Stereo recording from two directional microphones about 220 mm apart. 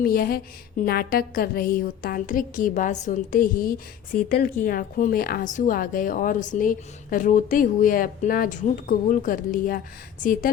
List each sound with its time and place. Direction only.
0.0 s a woman's voice: 40° left (ahead or behind)